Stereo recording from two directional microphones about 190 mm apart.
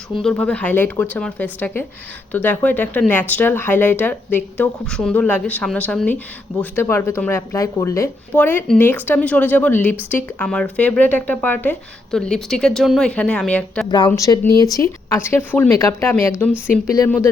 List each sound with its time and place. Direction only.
0.2 s speech: 5° left (ahead or behind)
14.1 s speech: 15° left (ahead or behind)